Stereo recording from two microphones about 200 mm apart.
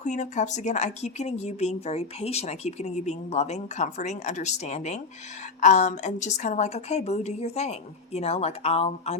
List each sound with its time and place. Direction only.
0.0 s speech: 35° left (ahead or behind)